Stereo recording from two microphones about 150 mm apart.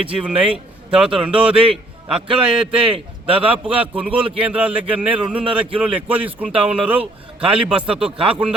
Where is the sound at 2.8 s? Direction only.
35° right (ahead or behind).